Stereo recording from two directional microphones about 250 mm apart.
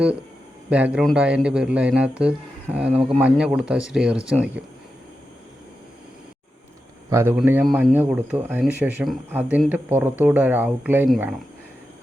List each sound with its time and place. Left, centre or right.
0.7 s a man's voice: centre
7.1 s a man's voice: centre